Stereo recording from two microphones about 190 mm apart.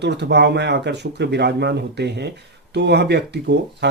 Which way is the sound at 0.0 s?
65° right (ahead or behind).